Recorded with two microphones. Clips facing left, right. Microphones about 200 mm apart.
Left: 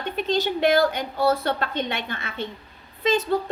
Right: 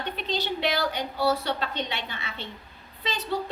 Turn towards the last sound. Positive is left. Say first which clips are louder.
# left 11 dB
turn(degrees=50)  # may be behind; listen again after turning